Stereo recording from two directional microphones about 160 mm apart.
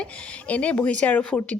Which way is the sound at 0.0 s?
10° left (ahead or behind).